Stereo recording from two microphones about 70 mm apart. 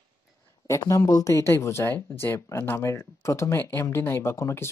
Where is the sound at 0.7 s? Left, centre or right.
Left.